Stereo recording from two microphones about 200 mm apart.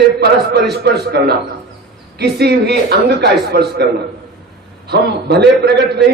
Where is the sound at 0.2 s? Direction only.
55° right (ahead or behind).